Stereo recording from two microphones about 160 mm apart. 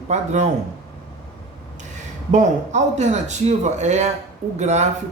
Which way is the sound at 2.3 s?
50° right (ahead or behind).